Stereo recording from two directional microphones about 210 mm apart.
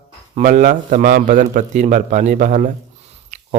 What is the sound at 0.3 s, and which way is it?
Speech, 35° right (ahead or behind).